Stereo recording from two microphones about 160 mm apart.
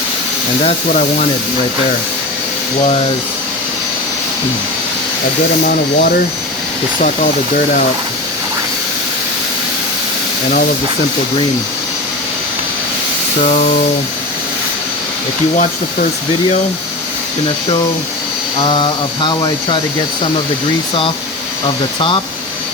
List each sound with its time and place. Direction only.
5.6 s speech: 70° left (ahead or behind)
18.7 s speech: 30° left (ahead or behind)